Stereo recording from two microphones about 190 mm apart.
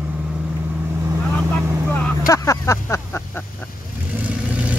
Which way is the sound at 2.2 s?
15° left (ahead or behind).